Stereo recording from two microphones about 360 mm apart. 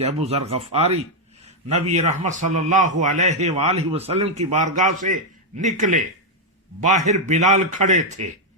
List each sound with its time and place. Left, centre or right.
0.0 s a man's voice: centre